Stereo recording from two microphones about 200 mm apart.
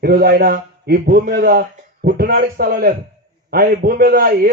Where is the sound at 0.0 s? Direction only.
50° right (ahead or behind).